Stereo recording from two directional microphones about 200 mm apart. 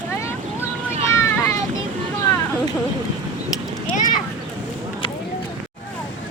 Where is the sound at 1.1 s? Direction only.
15° left (ahead or behind).